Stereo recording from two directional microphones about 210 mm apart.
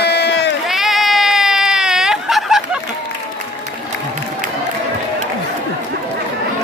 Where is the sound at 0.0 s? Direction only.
55° left (ahead or behind).